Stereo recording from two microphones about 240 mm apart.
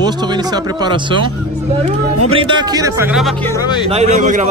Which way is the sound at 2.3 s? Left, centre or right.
Centre.